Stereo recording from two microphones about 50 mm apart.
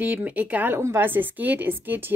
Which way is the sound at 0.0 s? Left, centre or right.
Right.